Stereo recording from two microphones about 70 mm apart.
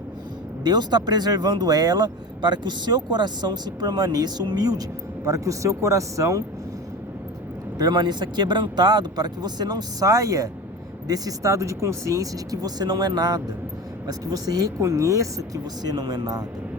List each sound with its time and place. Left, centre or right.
0.6 s speech: right
7.8 s speech: right
14.1 s speech: right